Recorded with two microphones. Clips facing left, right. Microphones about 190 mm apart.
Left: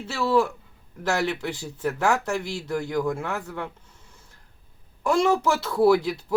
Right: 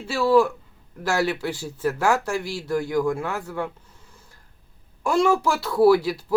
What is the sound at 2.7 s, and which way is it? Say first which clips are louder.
Speech: right 3 dB; 10° right (ahead or behind).